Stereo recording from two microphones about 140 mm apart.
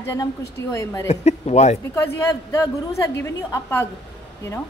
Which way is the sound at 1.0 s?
50° left (ahead or behind).